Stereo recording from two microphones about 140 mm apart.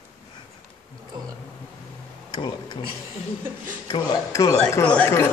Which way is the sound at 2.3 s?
30° left (ahead or behind).